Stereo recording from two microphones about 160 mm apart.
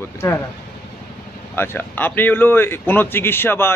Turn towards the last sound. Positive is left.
turn(degrees=15)  # may be behind; listen again after turning